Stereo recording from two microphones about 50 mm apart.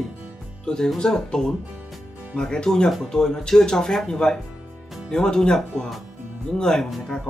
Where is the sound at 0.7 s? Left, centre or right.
Centre.